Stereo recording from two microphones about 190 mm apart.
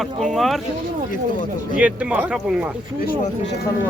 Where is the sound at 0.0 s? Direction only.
Centre (ahead or behind).